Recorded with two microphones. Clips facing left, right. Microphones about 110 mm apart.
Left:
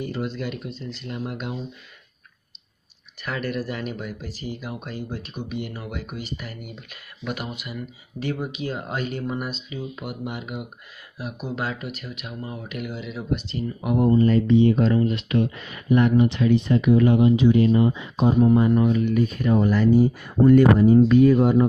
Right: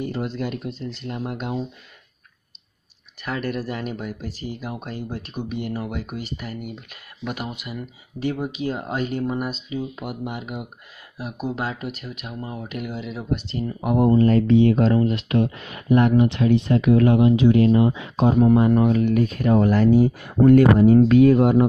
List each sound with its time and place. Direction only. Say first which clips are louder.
0.0 s speech: right 2 dB; 40° right (ahead or behind)
0.7 s speech: right 3 dB; 65° right (ahead or behind)
1.0 s speech: right 1 dB; 35° right (ahead or behind)
3.3 s speech: right 1 dB; 30° right (ahead or behind)
13.8 s speech: right 2 dB; 65° right (ahead or behind)